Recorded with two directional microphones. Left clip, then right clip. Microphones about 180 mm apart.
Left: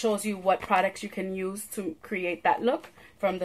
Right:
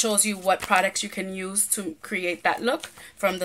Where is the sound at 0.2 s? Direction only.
15° right (ahead or behind).